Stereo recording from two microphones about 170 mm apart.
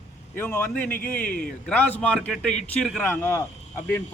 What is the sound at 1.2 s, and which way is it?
Speech, 55° left (ahead or behind).